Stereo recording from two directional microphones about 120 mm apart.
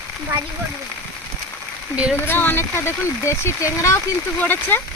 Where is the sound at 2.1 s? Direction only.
20° left (ahead or behind).